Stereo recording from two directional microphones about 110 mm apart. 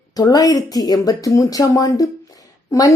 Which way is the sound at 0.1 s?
35° left (ahead or behind).